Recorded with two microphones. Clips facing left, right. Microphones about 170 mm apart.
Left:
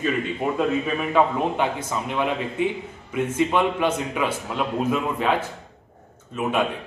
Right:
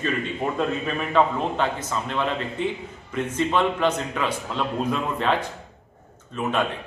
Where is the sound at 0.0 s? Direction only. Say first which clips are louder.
Left 2 dB; 5° left (ahead or behind).